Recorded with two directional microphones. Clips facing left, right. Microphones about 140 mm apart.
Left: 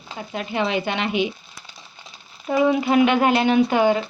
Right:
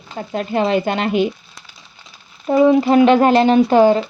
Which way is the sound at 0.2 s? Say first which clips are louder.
Right 6 dB; 40° right (ahead or behind).